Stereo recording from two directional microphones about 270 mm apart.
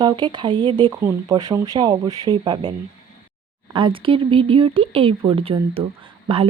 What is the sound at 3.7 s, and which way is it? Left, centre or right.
A woman's voice, centre.